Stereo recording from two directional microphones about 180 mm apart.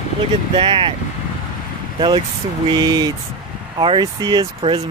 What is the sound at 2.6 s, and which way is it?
Speech, 20° right (ahead or behind).